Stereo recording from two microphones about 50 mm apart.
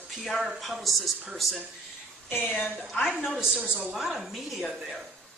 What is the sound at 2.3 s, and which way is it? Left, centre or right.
Speech, left.